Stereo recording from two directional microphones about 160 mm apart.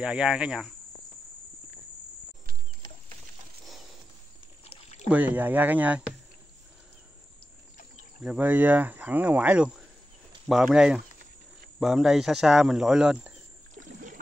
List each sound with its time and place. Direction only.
0.0 s speech: 5° right (ahead or behind)
5.1 s speech: 10° right (ahead or behind)
8.2 s speech: 10° right (ahead or behind)
13.7 s rowboat: 55° right (ahead or behind)